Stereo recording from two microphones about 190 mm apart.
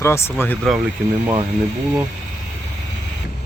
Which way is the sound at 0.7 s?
Centre (ahead or behind).